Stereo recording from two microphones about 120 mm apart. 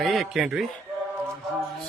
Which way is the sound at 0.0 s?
Centre (ahead or behind).